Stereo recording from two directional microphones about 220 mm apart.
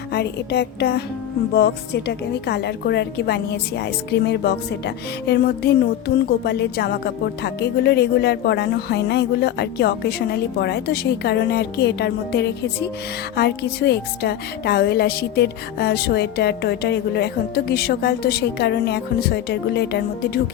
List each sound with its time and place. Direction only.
0.1 s speech: 50° left (ahead or behind)